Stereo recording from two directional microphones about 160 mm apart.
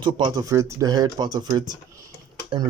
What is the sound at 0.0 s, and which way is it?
Speech, 25° right (ahead or behind).